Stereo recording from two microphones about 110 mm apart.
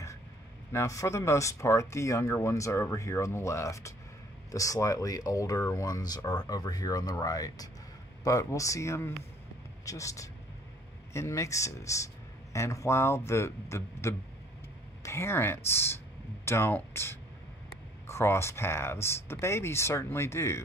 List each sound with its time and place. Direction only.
0.7 s speech: 25° left (ahead or behind)